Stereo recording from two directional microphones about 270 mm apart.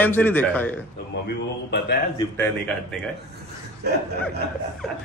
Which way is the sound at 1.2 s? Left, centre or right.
Left.